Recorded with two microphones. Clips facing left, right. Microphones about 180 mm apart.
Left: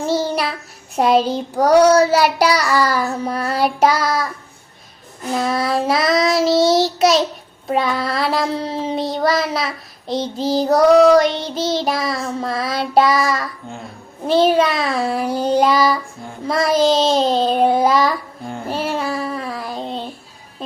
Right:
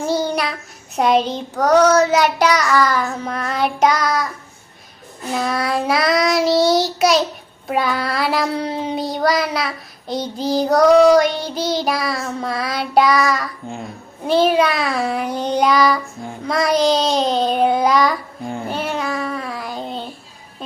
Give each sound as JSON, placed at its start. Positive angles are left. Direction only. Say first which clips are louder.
{"t": 0.0, "sound": "child singing", "louder": "left 1 dB", "side_deg": 0}
{"t": 5.4, "sound": "child singing", "louder": "left 1 dB", "side_deg": 0}
{"t": 18.9, "sound": "a sound", "louder": "left 1 dB", "side_deg": 30}
{"t": 19.5, "sound": "child singing", "louder": "left 1 dB", "side_deg": 0}